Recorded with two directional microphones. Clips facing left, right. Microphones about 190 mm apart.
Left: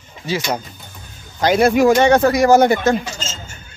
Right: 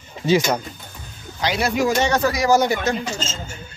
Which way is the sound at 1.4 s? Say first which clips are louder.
Left 8 dB; 50° left (ahead or behind).